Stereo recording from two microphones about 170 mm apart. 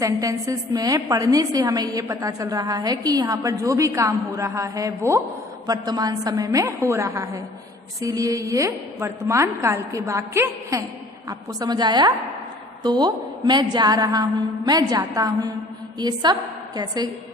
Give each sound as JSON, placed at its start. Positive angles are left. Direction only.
{"t": 0.0, "sound": "a woman's voice", "side_deg": -20}